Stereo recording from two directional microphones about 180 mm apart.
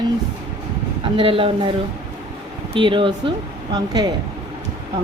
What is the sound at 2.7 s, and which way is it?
Speech, 30° right (ahead or behind).